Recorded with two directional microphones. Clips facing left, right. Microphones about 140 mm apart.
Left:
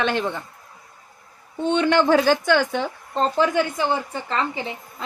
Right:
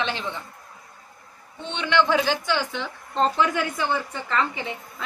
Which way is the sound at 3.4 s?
30° left (ahead or behind).